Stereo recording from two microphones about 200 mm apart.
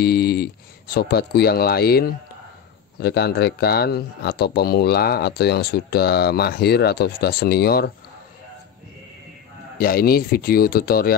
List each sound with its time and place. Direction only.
0.0 s speech: 50° left (ahead or behind)
9.8 s speech: 50° left (ahead or behind)